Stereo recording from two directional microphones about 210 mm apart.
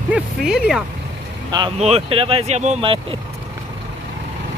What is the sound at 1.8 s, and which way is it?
Speech, 30° right (ahead or behind).